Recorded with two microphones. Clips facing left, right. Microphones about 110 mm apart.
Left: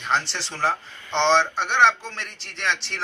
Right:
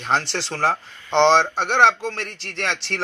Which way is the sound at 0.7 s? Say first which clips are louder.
Right 3 dB; 40° right (ahead or behind).